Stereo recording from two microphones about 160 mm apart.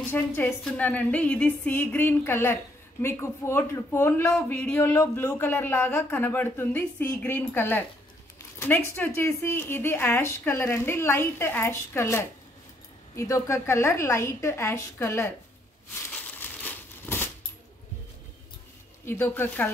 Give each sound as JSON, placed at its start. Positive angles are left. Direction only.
{"t": 0.1, "sound": "a woman's voice", "side_deg": 15}
{"t": 16.1, "sound": "crumpling", "side_deg": 10}
{"t": 19.0, "sound": "a woman's voice", "side_deg": 15}